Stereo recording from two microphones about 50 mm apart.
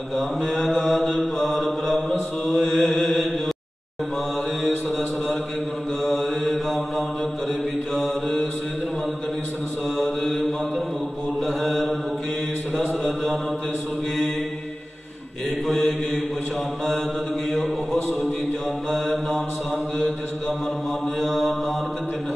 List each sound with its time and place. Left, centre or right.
0.1 s mantra: centre
4.6 s mantra: centre
9.9 s mantra: centre
13.0 s mantra: centre
15.6 s mantra: centre
18.9 s mantra: centre
21.2 s mantra: centre